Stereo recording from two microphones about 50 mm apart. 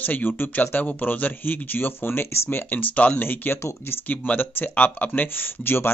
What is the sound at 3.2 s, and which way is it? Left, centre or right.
Speech, left.